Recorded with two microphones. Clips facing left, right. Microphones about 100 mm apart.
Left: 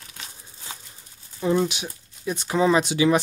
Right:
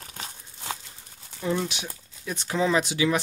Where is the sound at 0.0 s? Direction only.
40° right (ahead or behind).